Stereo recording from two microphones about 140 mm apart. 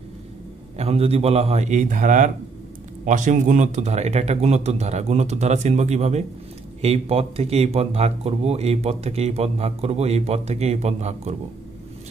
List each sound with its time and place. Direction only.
0.7 s speech: 45° right (ahead or behind)